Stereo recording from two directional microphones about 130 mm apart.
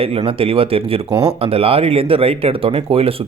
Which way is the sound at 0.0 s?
45° right (ahead or behind).